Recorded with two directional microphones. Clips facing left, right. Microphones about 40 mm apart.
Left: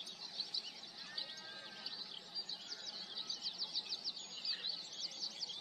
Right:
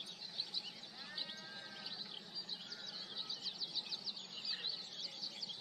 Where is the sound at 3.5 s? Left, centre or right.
Centre.